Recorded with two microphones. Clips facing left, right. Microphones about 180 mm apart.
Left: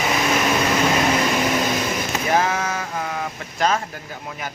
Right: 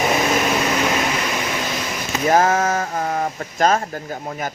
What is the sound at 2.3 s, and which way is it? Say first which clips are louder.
Speech: right 5 dB; 45° right (ahead or behind).